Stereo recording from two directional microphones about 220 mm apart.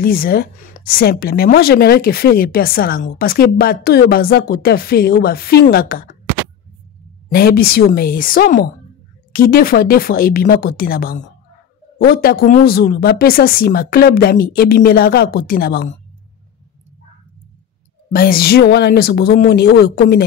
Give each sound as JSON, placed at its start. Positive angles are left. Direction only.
{"t": 0.0, "sound": "a woman's voice", "side_deg": 40}
{"t": 7.2, "sound": "a woman's voice", "side_deg": 40}
{"t": 18.1, "sound": "a woman's voice", "side_deg": 40}